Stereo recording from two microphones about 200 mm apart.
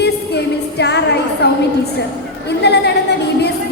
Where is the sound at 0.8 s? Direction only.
55° left (ahead or behind).